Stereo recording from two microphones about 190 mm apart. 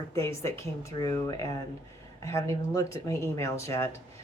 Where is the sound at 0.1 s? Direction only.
15° left (ahead or behind).